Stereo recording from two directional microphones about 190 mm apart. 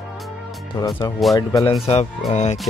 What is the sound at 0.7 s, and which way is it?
Speech, 20° left (ahead or behind).